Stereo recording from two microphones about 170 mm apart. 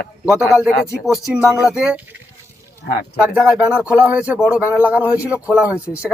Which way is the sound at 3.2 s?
5° right (ahead or behind).